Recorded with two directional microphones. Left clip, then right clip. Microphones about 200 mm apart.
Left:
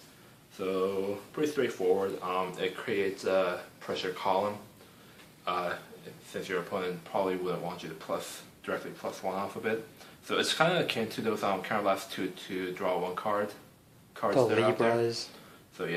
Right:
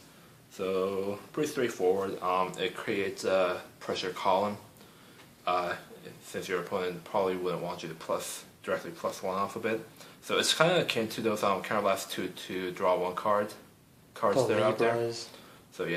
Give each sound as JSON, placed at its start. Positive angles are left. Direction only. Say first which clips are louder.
{"t": 0.6, "sound": "speech", "louder": "even", "side_deg": -45}
{"t": 14.3, "sound": "speech", "louder": "left 2 dB", "side_deg": 20}
{"t": 15.8, "sound": "speech", "louder": "right 2 dB", "side_deg": -45}